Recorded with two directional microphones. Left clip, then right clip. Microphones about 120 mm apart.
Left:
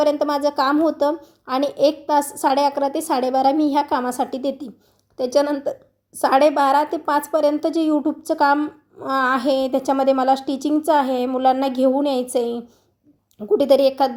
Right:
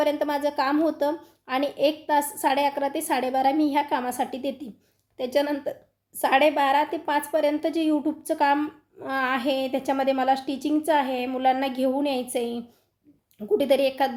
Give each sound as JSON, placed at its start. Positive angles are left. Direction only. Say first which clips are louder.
{"t": 0.0, "sound": "a woman's voice", "louder": "left 6 dB", "side_deg": 25}
{"t": 8.5, "sound": "a woman's voice", "louder": "left 4 dB", "side_deg": 15}
{"t": 9.0, "sound": "a woman's voice", "louder": "left 6 dB", "side_deg": 30}